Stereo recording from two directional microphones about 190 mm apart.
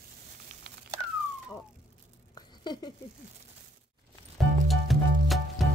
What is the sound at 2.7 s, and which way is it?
Patter, 20° left (ahead or behind).